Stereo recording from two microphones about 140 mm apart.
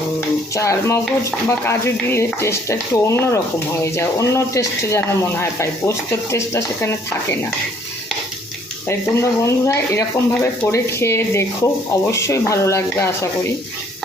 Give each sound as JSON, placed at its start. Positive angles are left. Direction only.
{"t": 0.5, "sound": "speech", "side_deg": 20}
{"t": 8.9, "sound": "speech", "side_deg": 20}